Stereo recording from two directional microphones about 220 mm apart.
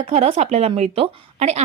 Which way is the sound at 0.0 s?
30° right (ahead or behind).